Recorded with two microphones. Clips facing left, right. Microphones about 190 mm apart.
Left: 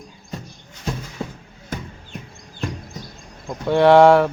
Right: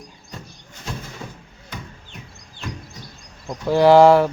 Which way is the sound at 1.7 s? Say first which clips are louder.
Left 6 dB; 45° left (ahead or behind).